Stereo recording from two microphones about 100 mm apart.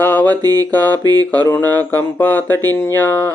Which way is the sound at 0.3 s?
40° right (ahead or behind).